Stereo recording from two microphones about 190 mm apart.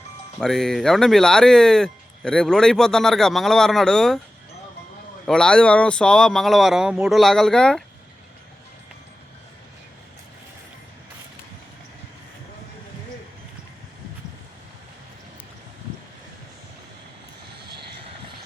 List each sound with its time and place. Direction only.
0.3 s speech: centre (ahead or behind)
5.2 s speech: 5° left (ahead or behind)